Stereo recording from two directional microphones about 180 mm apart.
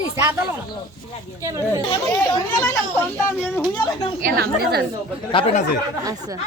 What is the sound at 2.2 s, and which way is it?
A woman's voice, 15° left (ahead or behind).